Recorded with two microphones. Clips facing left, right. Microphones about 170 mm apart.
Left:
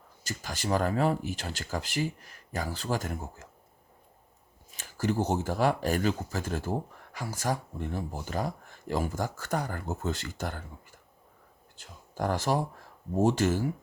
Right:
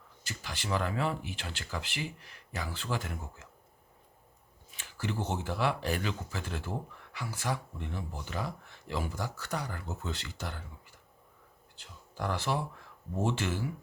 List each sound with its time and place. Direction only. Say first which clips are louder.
0.3 s speech: left 5 dB; 40° left (ahead or behind)
4.7 s speech: left 7 dB; 40° left (ahead or behind)